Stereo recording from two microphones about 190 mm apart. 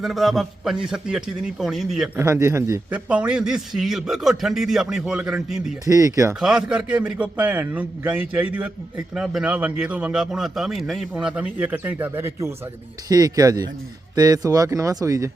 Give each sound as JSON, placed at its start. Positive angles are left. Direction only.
{"t": 0.0, "sound": "a man's voice", "side_deg": 0}
{"t": 2.1, "sound": "a man's voice", "side_deg": -15}
{"t": 5.8, "sound": "a man's voice", "side_deg": -15}
{"t": 6.4, "sound": "a man's voice", "side_deg": -5}